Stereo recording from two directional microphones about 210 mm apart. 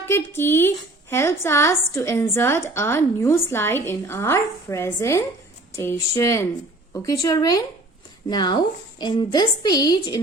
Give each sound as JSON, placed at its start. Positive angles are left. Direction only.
{"t": 0.1, "sound": "a woman's voice", "side_deg": 10}